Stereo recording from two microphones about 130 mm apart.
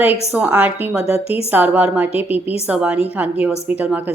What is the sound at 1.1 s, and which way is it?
Speech, 50° left (ahead or behind).